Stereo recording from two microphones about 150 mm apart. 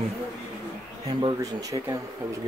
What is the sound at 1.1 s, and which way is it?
Speech, 30° right (ahead or behind).